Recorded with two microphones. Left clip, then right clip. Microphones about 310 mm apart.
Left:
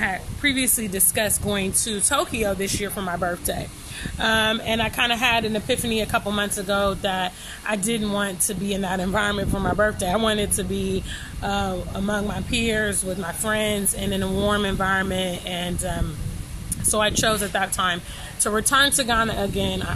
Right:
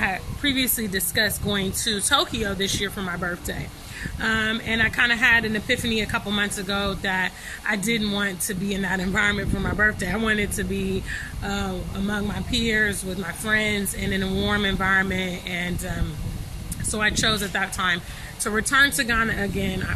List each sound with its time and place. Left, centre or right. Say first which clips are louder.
0.0 s speech: left 1 dB; centre
16.9 s speech: left 1 dB; centre